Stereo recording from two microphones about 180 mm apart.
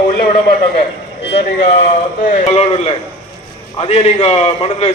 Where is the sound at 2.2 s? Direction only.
45° left (ahead or behind).